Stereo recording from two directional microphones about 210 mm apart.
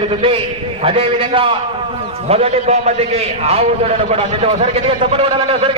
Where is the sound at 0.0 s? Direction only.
25° right (ahead or behind).